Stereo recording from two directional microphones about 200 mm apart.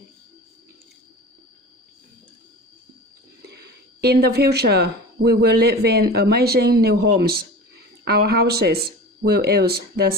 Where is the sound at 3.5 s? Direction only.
55° right (ahead or behind).